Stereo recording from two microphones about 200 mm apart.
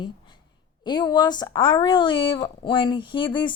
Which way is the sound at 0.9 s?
20° left (ahead or behind).